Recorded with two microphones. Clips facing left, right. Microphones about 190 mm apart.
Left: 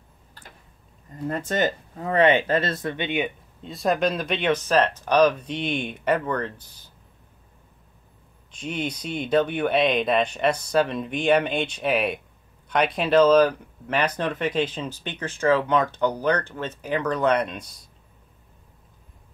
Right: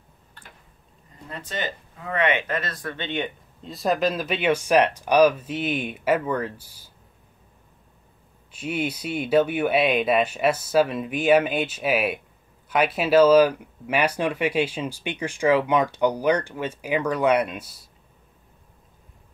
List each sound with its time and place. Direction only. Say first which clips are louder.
1.3 s speech: left 7 dB; 45° left (ahead or behind); by 3.3 s 10° left (ahead or behind)
3.6 s speech: even; centre (ahead or behind)
8.5 s speech: right 2 dB; 5° right (ahead or behind)